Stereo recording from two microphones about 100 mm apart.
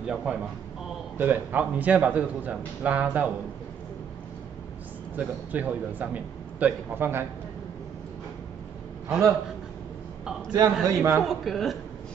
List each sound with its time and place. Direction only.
0.0 s speech: 10° right (ahead or behind)
5.1 s speech: 15° right (ahead or behind)
10.5 s a man's voice: 35° right (ahead or behind)
11.2 s speech: centre (ahead or behind)